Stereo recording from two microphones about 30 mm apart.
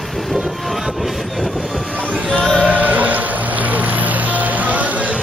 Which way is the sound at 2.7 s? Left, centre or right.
Right.